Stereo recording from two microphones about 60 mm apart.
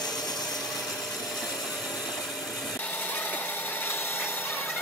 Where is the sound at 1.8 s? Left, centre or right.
Centre.